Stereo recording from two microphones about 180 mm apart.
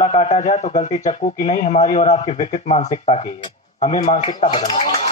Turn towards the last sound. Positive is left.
turn(degrees=35)  # may be behind; listen again after turning